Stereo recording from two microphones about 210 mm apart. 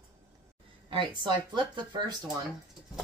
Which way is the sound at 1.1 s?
20° right (ahead or behind).